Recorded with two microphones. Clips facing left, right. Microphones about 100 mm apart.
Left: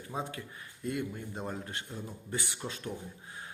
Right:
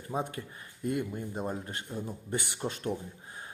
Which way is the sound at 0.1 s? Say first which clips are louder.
Right 4 dB; 15° right (ahead or behind).